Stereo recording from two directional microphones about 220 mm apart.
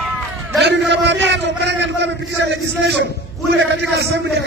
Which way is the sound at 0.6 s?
50° right (ahead or behind).